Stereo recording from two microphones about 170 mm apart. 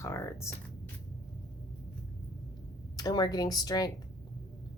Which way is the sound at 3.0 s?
20° left (ahead or behind).